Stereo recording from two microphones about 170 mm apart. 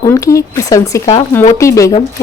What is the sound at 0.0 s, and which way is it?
A woman's voice, 20° left (ahead or behind).